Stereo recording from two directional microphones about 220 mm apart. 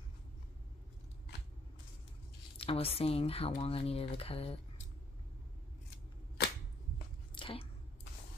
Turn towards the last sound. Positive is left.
turn(degrees=25)  # may be behind; listen again after turning